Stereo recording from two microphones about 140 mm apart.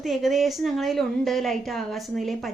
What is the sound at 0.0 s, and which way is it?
A woman's voice, centre (ahead or behind).